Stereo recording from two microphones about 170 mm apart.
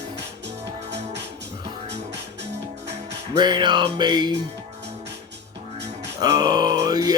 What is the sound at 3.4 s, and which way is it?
Music, 25° right (ahead or behind).